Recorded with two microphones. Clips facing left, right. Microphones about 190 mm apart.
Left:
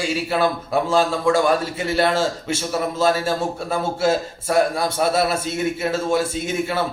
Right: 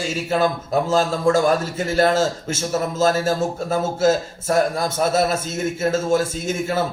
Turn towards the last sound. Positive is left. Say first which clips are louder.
# even
turn(degrees=-45)  # may be behind; listen again after turning